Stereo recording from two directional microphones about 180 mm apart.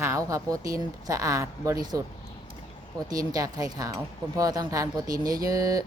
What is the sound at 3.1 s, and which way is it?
Speech, 20° right (ahead or behind).